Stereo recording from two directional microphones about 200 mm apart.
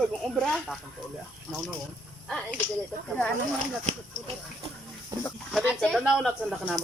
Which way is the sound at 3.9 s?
35° right (ahead or behind).